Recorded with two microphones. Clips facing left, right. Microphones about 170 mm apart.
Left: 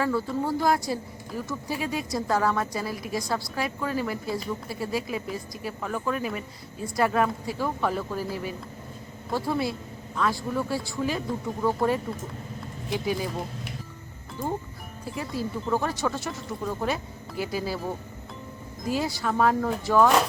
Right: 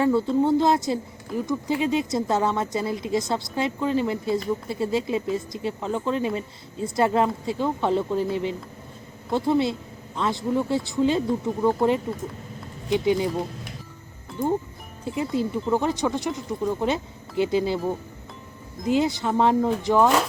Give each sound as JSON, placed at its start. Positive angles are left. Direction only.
{"t": 0.0, "sound": "a woman's voice", "side_deg": -25}
{"t": 15.0, "sound": "a woman's voice", "side_deg": -20}
{"t": 18.9, "sound": "a woman's voice", "side_deg": -20}